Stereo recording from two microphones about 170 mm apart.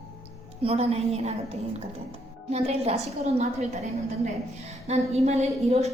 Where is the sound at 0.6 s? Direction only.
35° right (ahead or behind).